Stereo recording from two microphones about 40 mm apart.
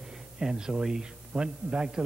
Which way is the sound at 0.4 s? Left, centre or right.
Centre.